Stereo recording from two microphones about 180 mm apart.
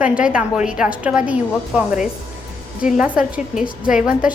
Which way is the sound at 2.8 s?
5° right (ahead or behind).